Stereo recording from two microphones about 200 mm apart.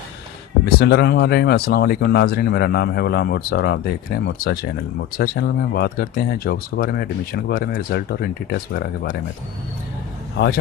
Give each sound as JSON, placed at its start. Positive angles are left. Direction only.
{"t": 0.6, "sound": "speech", "side_deg": 55}
{"t": 10.3, "sound": "a man's voice", "side_deg": 55}